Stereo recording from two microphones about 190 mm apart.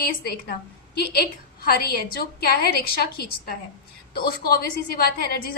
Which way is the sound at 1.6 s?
50° left (ahead or behind).